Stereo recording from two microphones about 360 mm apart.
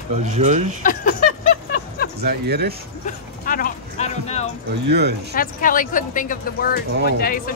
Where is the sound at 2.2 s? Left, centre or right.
Right.